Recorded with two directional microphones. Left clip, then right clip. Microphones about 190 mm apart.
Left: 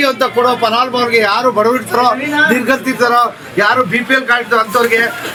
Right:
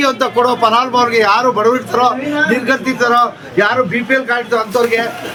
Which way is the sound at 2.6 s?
50° left (ahead or behind).